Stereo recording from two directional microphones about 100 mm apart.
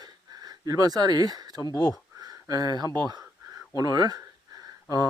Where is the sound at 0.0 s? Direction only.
40° right (ahead or behind).